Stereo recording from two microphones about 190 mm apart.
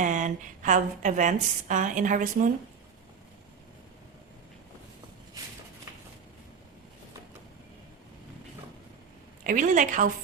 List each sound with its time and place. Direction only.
0.0 s a woman's voice: 40° right (ahead or behind)
9.4 s a woman's voice: 45° right (ahead or behind)